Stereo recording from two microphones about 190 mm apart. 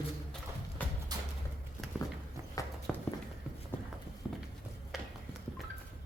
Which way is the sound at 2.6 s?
20° left (ahead or behind).